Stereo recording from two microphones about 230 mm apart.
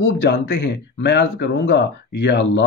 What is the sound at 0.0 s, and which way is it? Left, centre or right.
Speech, left.